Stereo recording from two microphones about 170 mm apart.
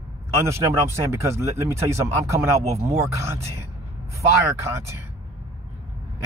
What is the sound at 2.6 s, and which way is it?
Speech, 40° right (ahead or behind).